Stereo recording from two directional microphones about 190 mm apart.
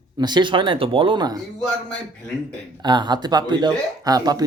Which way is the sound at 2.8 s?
25° right (ahead or behind).